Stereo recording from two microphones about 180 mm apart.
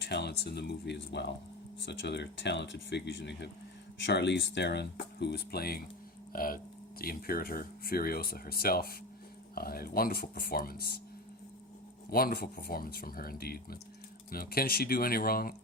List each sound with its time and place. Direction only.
0.0 s speech: 70° left (ahead or behind)
12.1 s speech: 55° left (ahead or behind)